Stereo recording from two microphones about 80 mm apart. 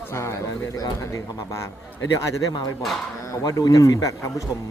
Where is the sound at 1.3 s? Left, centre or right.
Left.